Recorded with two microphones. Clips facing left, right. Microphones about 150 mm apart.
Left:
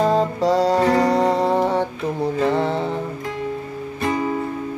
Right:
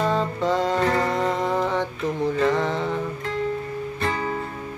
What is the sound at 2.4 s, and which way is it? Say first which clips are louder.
Mantra: left 3 dB; 35° left (ahead or behind).